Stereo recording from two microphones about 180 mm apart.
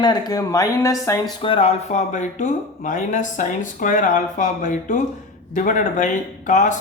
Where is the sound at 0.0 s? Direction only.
20° left (ahead or behind).